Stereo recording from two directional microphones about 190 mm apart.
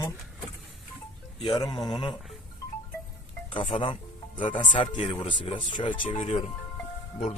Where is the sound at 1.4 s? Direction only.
25° left (ahead or behind).